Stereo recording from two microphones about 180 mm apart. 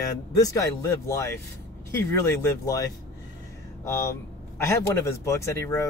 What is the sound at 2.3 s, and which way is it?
Speech, 15° left (ahead or behind).